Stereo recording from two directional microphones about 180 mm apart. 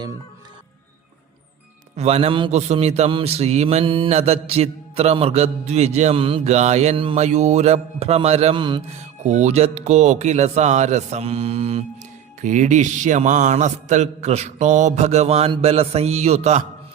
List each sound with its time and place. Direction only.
2.0 s a man's voice: 35° right (ahead or behind)
9.0 s a man's voice: 40° right (ahead or behind)